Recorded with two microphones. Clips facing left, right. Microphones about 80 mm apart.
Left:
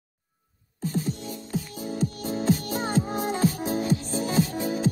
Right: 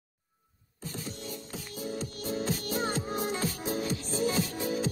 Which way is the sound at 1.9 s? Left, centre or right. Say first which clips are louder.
Left 6 dB; left.